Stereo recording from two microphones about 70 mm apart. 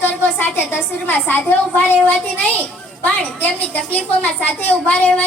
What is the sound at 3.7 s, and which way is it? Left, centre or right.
A woman's voice, left.